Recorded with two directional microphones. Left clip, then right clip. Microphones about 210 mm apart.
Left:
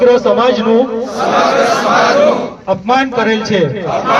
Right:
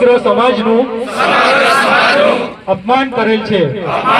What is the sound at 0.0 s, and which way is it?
Speech, 35° right (ahead or behind).